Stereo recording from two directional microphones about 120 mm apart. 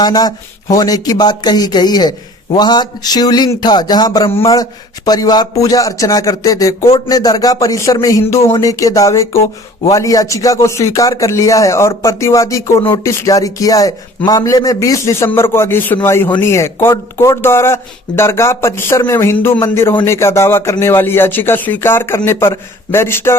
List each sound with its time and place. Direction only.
0.0 s speech: 35° left (ahead or behind)